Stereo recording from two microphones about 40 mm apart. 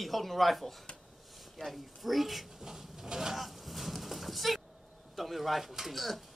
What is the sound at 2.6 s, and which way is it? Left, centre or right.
Filing, centre.